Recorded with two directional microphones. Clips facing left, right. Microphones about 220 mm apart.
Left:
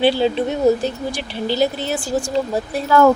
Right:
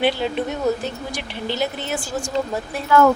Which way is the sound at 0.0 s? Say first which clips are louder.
Left 5 dB; 30° left (ahead or behind).